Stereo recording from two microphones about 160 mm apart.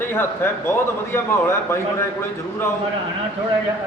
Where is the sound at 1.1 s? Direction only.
15° left (ahead or behind).